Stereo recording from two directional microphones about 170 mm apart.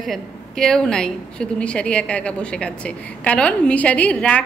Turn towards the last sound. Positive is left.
turn(degrees=10)  # may be behind; listen again after turning